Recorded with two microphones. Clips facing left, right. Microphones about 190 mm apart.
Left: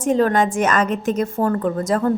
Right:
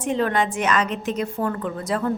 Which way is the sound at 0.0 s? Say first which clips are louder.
Left 5 dB; 45° left (ahead or behind).